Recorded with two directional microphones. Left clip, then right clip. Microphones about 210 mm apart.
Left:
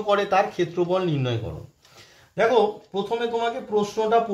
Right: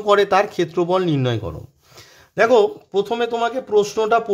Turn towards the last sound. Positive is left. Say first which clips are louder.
# right 4 dB
turn(degrees=-55)  # may be behind; listen again after turning